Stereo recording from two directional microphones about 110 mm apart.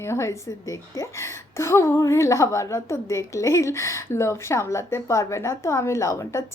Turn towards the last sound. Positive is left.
turn(degrees=30)  # may be behind; listen again after turning